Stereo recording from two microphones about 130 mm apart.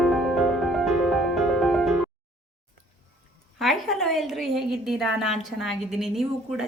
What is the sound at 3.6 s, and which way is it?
A woman's voice, centre (ahead or behind).